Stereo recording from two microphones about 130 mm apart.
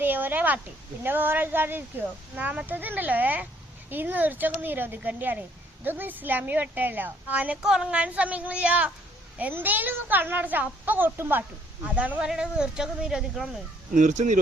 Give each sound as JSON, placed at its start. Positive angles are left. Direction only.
{"t": 0.0, "sound": "a woman's voice", "side_deg": -15}
{"t": 13.9, "sound": "speech", "side_deg": -70}